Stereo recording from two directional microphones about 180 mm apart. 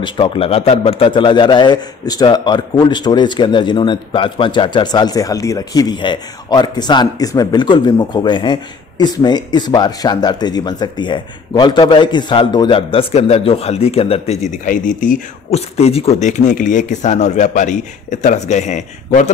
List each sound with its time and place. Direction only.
0.0 s a man's voice: 30° left (ahead or behind)